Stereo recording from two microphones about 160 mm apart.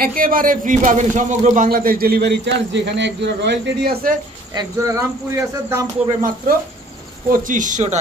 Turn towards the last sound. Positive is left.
turn(degrees=-50)  # may be behind; listen again after turning